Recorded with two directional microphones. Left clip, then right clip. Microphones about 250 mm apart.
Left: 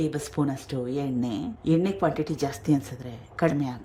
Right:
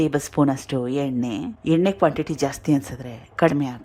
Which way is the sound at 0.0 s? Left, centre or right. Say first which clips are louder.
Right 7 dB; centre.